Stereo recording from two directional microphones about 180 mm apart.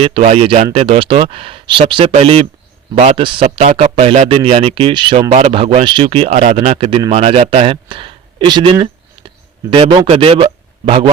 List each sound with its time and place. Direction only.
0.0 s speech: 35° right (ahead or behind)